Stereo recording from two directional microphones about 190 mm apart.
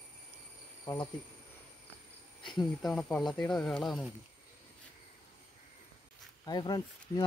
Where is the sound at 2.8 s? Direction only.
5° left (ahead or behind).